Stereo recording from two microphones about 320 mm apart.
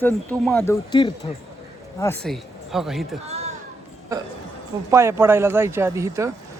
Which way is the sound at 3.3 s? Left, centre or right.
Centre.